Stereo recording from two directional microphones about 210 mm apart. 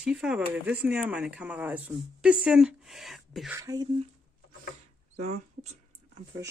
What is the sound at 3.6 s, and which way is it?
Speech, 15° right (ahead or behind).